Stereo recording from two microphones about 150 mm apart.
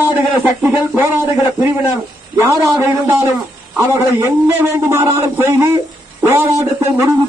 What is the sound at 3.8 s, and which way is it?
A man's voice, 15° right (ahead or behind).